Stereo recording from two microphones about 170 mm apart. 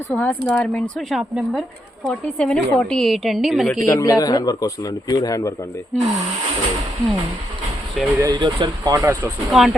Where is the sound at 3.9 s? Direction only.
20° left (ahead or behind).